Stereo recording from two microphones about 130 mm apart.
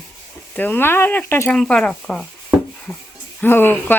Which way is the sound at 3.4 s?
15° left (ahead or behind).